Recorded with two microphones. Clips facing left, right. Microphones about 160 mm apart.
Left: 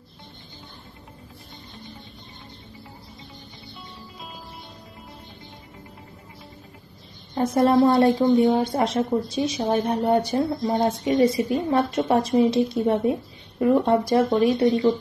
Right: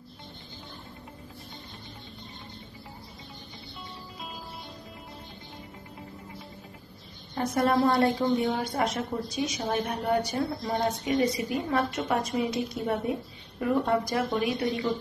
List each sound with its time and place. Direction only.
7.4 s a woman's voice: 25° left (ahead or behind)